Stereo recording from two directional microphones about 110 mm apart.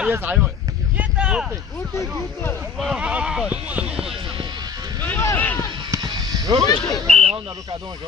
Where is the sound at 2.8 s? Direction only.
10° right (ahead or behind).